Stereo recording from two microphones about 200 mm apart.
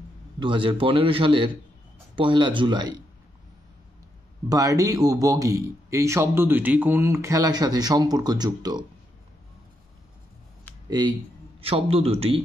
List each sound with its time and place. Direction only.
0.4 s a man's voice: 25° right (ahead or behind)
4.5 s speech: 15° right (ahead or behind)
11.6 s a man's voice: 30° right (ahead or behind)